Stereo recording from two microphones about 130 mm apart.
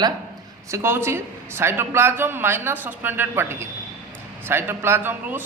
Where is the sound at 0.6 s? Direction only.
20° right (ahead or behind).